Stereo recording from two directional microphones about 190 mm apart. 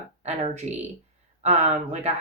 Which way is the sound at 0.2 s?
35° right (ahead or behind).